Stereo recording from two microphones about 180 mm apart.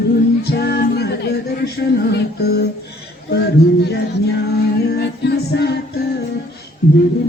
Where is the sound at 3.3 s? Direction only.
65° left (ahead or behind).